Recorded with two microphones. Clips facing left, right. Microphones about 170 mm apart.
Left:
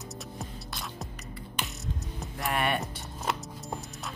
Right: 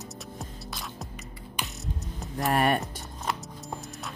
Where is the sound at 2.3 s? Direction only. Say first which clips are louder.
Right 5 dB; 40° right (ahead or behind).